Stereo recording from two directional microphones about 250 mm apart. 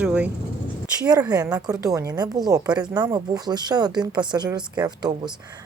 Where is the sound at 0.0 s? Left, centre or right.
Centre.